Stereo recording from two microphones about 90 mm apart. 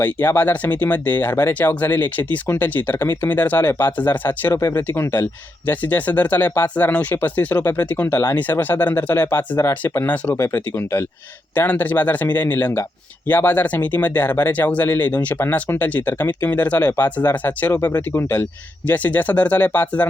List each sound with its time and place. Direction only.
0.0 s speech: 20° left (ahead or behind)